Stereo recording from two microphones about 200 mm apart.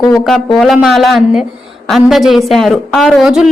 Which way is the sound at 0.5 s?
Centre (ahead or behind).